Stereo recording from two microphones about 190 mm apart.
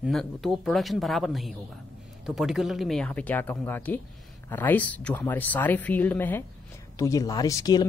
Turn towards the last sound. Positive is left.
turn(degrees=20)  # may be behind; listen again after turning